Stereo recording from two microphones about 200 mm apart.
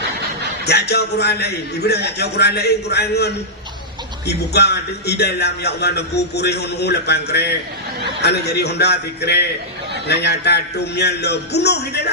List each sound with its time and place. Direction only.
0.6 s a man's voice: 55° left (ahead or behind)